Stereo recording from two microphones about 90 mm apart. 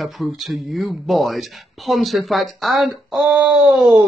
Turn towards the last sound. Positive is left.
turn(degrees=0)  # may be behind; listen again after turning